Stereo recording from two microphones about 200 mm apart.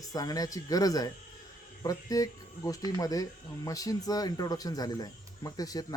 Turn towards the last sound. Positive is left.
turn(degrees=20)  # may be behind; listen again after turning